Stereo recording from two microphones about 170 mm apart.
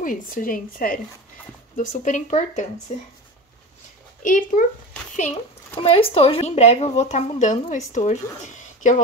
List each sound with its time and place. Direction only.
0.0 s speech: 55° left (ahead or behind)
4.2 s speech: 50° left (ahead or behind)
5.8 s speech: 35° left (ahead or behind)